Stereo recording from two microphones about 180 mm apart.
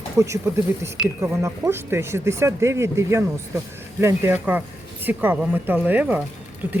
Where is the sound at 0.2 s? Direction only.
15° right (ahead or behind).